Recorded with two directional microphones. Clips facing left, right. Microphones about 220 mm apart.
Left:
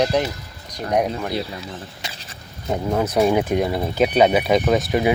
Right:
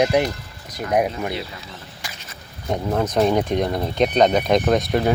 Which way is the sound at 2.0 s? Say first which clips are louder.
Left 2 dB; 20° left (ahead or behind).